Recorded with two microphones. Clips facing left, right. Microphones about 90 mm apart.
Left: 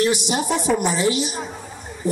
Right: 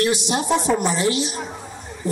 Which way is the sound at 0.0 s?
15° left (ahead or behind).